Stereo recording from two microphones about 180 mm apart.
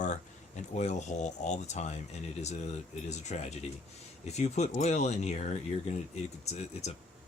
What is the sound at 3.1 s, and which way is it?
Speech, 40° left (ahead or behind).